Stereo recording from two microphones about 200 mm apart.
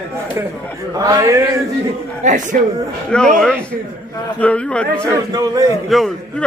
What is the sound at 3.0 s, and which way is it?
A man's voice, 5° left (ahead or behind).